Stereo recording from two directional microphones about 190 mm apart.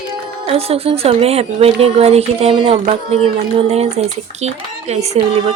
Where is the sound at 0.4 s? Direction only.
30° right (ahead or behind).